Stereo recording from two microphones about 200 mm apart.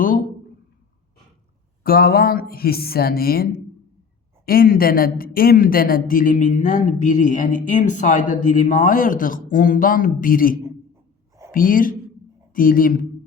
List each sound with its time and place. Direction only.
1.8 s speech: 50° left (ahead or behind)